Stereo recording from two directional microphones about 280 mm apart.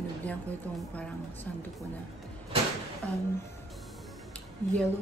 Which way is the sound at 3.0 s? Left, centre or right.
Centre.